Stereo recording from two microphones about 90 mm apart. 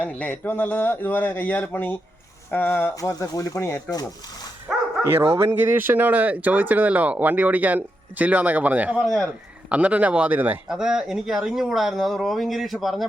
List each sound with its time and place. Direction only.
0.1 s a man's voice: 20° left (ahead or behind)
2.9 s speech: 40° left (ahead or behind)
5.0 s speech: 30° right (ahead or behind)
9.0 s speech: centre (ahead or behind)
9.6 s speech: 15° right (ahead or behind)
10.7 s speech: 5° right (ahead or behind)